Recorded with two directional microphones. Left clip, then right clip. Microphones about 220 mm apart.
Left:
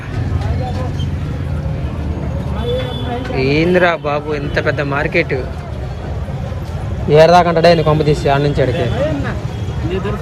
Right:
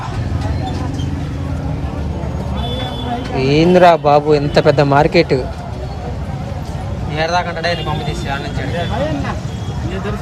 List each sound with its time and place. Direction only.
3.3 s speech: 10° right (ahead or behind)
7.1 s a man's voice: 10° left (ahead or behind)